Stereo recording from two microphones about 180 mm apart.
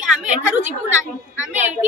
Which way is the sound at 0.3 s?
40° right (ahead or behind).